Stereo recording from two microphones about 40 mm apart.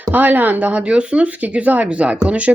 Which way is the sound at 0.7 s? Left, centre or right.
Right.